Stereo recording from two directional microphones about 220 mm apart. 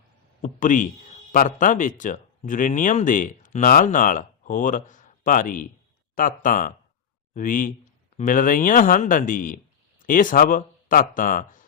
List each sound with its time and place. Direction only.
0.4 s speech: 35° left (ahead or behind)